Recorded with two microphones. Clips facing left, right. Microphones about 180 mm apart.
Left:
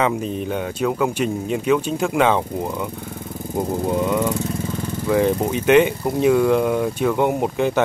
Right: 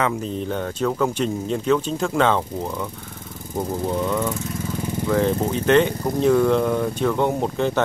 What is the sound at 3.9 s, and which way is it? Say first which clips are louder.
Speech: left 3 dB; 15° left (ahead or behind).